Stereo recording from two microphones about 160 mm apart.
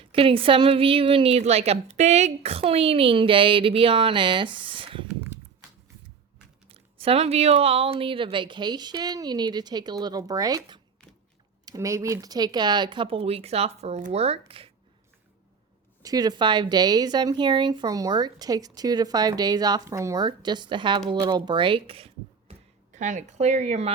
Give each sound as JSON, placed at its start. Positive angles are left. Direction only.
{"t": 0.1, "sound": "a woman's voice", "side_deg": -35}
{"t": 6.7, "sound": "a woman's voice", "side_deg": -35}
{"t": 16.0, "sound": "a woman's voice", "side_deg": -25}
{"t": 21.1, "sound": "a sound", "side_deg": -25}
{"t": 23.0, "sound": "speech", "side_deg": -50}